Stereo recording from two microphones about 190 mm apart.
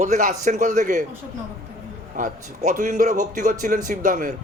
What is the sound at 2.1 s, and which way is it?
A man's voice, 40° right (ahead or behind).